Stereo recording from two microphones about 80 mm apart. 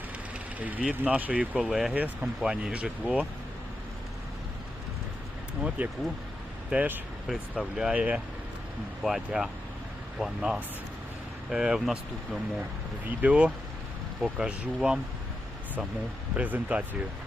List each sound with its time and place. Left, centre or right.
0.6 s speech: centre
1.7 s speech: centre
5.6 s speech: centre
13.1 s speech: centre
14.2 s speech: centre
16.3 s speech: centre